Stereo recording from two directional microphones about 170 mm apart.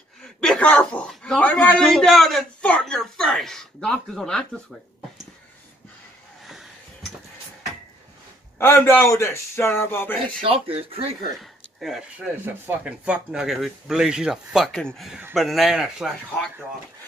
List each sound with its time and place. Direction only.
0.2 s a man's voice: 5° left (ahead or behind)
8.5 s speech: 15° left (ahead or behind)
10.4 s speech: 35° right (ahead or behind)
12.4 s a man's voice: 10° right (ahead or behind)